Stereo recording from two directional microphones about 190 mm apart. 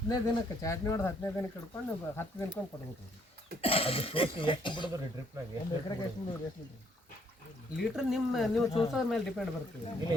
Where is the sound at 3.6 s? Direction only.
30° left (ahead or behind).